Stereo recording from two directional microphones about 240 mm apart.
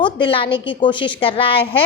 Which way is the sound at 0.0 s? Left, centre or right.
Left.